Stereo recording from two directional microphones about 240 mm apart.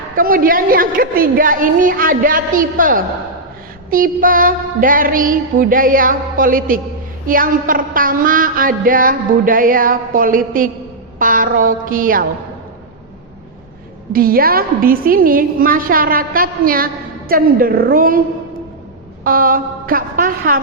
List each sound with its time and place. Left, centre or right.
0.2 s a woman's voice: right
14.1 s a woman's voice: right
19.2 s a woman's voice: right